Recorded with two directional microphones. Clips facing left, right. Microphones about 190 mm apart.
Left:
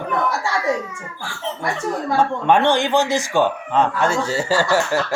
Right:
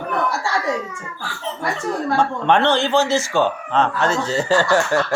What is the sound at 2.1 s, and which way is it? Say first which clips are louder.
Speech: left 1 dB; 10° left (ahead or behind).